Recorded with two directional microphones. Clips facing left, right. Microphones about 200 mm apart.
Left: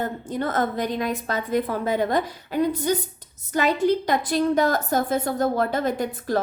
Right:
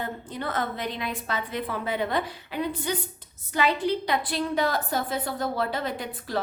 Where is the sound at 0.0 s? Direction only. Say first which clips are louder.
Left 6 dB; 45° left (ahead or behind).